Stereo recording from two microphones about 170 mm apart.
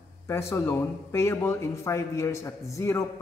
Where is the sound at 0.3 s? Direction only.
15° left (ahead or behind).